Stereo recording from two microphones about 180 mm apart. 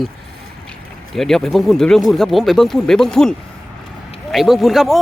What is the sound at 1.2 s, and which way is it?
A man's voice, centre (ahead or behind).